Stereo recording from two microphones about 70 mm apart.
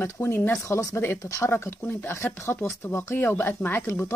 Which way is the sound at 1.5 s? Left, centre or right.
Left.